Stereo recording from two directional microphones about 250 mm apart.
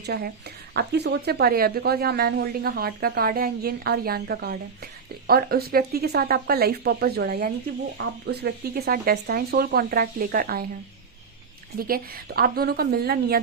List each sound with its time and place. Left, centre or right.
0.0 s a woman's voice: right
11.8 s speech: right